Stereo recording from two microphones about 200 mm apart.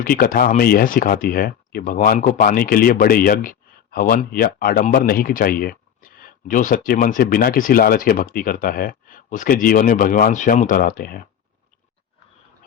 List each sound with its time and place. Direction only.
0.0 s speech: 45° left (ahead or behind)